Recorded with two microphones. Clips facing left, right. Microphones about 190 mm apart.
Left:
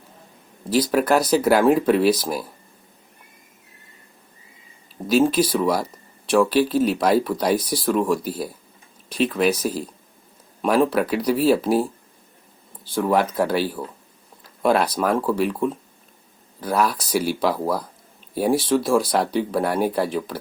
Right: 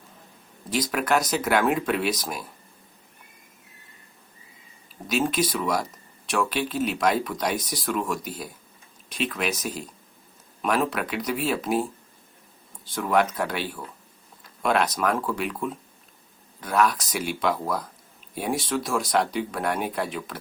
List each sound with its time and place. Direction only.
0.7 s speech: 35° left (ahead or behind)
5.0 s speech: 30° left (ahead or behind)